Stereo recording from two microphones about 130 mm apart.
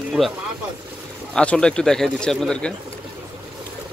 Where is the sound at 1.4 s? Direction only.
5° left (ahead or behind).